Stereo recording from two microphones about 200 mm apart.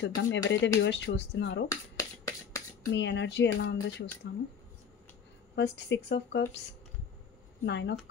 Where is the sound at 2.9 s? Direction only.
65° left (ahead or behind).